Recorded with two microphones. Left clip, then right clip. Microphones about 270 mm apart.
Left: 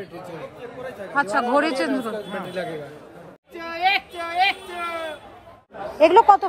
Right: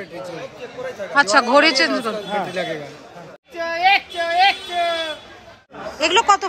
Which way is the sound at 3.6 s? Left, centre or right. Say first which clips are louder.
Right 5 dB; centre.